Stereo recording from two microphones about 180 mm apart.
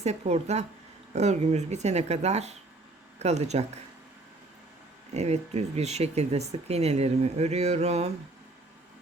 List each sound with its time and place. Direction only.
0.0 s speech: 35° right (ahead or behind)
5.1 s speech: 35° right (ahead or behind)